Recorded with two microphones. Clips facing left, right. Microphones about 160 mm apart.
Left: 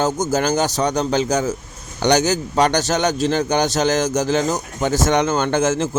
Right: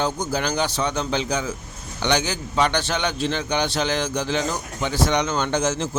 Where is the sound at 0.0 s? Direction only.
45° left (ahead or behind).